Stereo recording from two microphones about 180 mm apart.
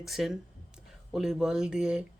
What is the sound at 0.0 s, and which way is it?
Speech, centre (ahead or behind).